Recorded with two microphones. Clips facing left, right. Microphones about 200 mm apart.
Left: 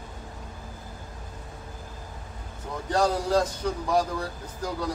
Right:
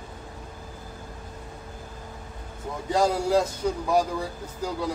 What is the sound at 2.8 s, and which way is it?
Speech, 10° right (ahead or behind).